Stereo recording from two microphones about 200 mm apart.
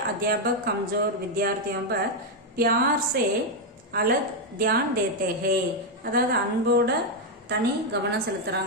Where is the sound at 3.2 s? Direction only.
50° right (ahead or behind).